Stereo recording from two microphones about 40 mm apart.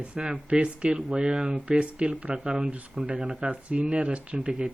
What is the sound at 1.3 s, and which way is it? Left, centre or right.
Speech, centre.